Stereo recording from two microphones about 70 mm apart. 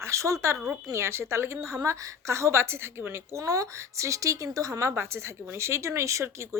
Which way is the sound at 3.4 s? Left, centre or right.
Right.